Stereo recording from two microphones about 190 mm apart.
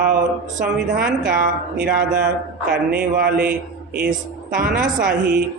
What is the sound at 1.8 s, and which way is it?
Speech, 55° right (ahead or behind).